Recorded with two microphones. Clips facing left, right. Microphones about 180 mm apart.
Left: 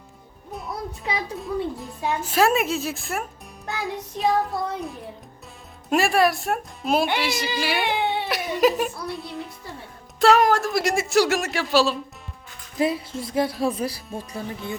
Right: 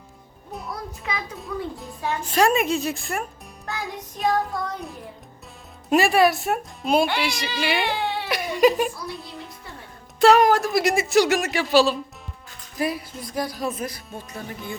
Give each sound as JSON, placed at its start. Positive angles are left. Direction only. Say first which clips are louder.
{"t": 0.7, "sound": "music", "louder": "left 3 dB", "side_deg": 30}
{"t": 2.2, "sound": "speech", "louder": "right 1 dB", "side_deg": 5}
{"t": 7.9, "sound": "baby cry", "louder": "left 2 dB", "side_deg": 20}
{"t": 8.3, "sound": "speech", "louder": "right 3 dB", "side_deg": 0}
{"t": 12.8, "sound": "a sound", "louder": "left 3 dB", "side_deg": 25}
{"t": 13.7, "sound": "speech", "louder": "left 3 dB", "side_deg": 30}
{"t": 14.1, "sound": "speech", "louder": "left 3 dB", "side_deg": 0}